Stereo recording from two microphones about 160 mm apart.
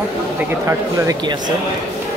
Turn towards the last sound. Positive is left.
turn(degrees=-20)  # may be behind; listen again after turning